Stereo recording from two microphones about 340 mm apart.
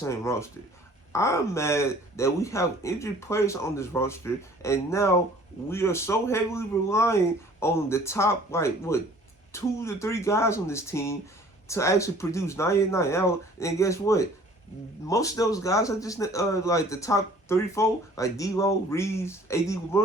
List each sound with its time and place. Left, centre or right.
0.0 s a man's voice: centre